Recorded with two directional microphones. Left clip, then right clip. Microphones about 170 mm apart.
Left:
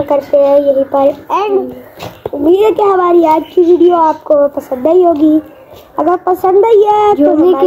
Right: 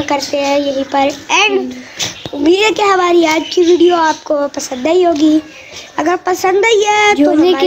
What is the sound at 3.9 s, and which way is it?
Child singing, 25° right (ahead or behind).